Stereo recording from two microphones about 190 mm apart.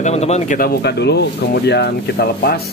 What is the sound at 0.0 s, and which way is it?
Speech, 35° left (ahead or behind).